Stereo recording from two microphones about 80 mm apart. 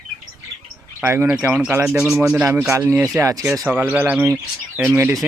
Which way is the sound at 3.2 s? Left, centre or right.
Right.